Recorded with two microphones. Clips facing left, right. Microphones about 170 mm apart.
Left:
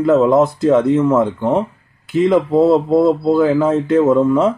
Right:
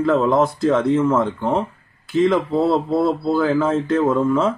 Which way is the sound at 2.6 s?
20° left (ahead or behind).